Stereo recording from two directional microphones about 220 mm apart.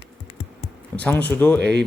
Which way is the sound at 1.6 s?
50° right (ahead or behind).